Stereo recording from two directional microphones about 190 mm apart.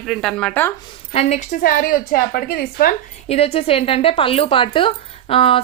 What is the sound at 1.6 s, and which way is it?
A woman's voice, 50° left (ahead or behind).